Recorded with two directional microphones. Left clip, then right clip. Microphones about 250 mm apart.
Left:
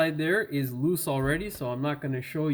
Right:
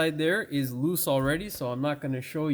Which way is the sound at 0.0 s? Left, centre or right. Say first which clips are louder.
Even; right.